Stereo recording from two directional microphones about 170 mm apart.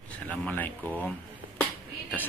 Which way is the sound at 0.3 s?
10° left (ahead or behind).